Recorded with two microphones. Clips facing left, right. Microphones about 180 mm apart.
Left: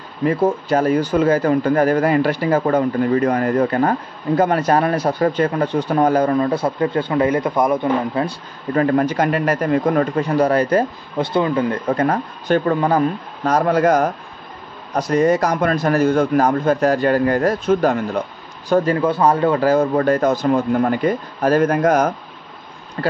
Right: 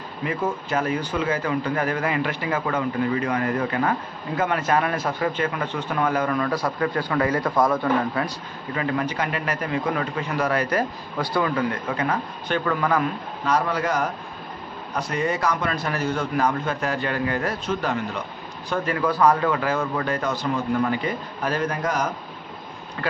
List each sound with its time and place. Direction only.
0.2 s speech: 40° left (ahead or behind)
8.7 s a man's voice: 45° left (ahead or behind); by 11.8 s 25° left (ahead or behind)
11.9 s a man's voice: 45° left (ahead or behind)
12.7 s speech: 30° left (ahead or behind)
13.4 s a man's voice: 45° left (ahead or behind)
18.7 s a man's voice: 30° left (ahead or behind); by 22.1 s 50° left (ahead or behind)